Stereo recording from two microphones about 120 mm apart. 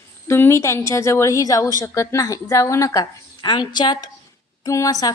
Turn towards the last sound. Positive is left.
turn(degrees=30)  # may be behind; listen again after turning